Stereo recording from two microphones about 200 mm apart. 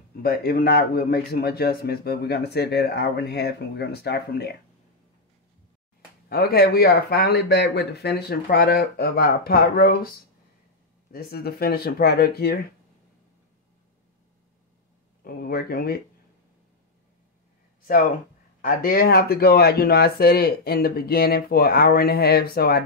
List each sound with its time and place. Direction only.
0.2 s a man's voice: 50° left (ahead or behind)
6.2 s a man's voice: 50° left (ahead or behind)
11.1 s a man's voice: 50° left (ahead or behind)
15.2 s a man's voice: 50° left (ahead or behind)
18.6 s a man's voice: 45° left (ahead or behind)